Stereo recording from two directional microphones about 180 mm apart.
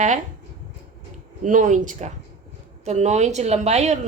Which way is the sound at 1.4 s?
45° right (ahead or behind).